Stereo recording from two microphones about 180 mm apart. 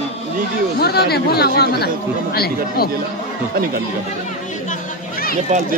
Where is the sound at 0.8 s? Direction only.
60° left (ahead or behind).